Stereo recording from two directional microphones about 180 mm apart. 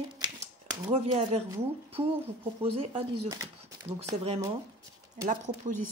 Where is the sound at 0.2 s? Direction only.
25° right (ahead or behind).